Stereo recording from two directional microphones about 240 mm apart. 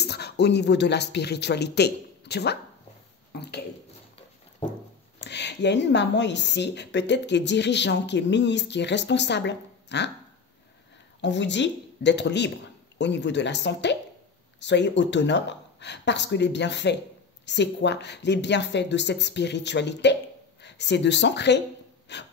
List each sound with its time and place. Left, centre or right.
0.0 s speech: left
5.2 s speech: left
11.1 s speech: left